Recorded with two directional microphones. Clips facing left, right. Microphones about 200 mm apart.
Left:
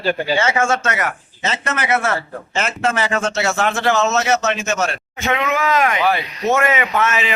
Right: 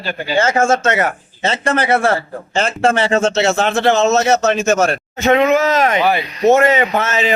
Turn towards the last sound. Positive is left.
turn(degrees=-35)  # may be behind; listen again after turning